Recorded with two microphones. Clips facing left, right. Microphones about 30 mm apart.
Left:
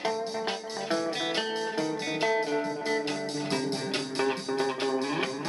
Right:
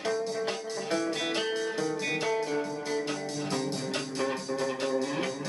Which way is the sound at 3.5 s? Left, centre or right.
Left.